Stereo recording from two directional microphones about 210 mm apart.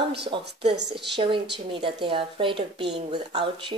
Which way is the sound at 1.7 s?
25° right (ahead or behind).